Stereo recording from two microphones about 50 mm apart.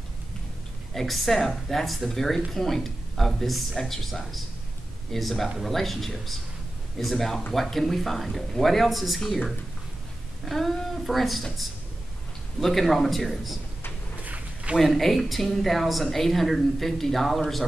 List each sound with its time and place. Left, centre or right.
0.9 s speech: centre
12.5 s speech: centre
14.2 s a sound: right
14.8 s speech: centre